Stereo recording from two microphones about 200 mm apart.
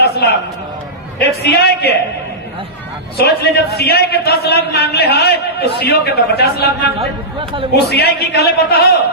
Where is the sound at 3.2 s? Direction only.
50° left (ahead or behind).